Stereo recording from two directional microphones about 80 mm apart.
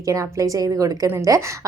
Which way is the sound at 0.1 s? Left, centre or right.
Right.